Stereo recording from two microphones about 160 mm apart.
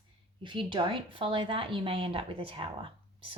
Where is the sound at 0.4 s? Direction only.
30° right (ahead or behind).